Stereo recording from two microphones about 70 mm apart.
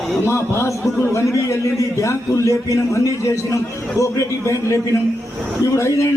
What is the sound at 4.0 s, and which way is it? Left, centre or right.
A man's voice, left.